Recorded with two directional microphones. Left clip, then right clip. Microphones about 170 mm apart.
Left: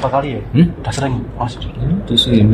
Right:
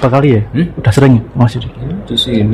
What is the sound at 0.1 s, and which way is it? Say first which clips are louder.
A man's voice: right 6 dB; 85° right.